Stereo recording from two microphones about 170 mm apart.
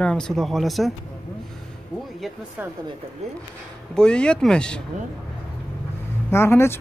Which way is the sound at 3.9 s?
5° left (ahead or behind).